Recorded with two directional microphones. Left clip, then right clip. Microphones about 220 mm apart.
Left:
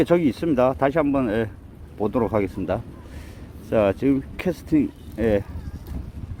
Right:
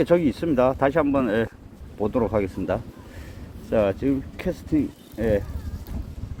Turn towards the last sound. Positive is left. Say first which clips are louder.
# left 2 dB
turn(degrees=40)  # may be behind; listen again after turning